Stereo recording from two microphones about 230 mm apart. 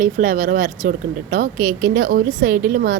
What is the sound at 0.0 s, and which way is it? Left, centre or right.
A woman's voice, right.